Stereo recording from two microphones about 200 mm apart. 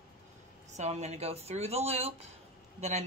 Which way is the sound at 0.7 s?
35° right (ahead or behind).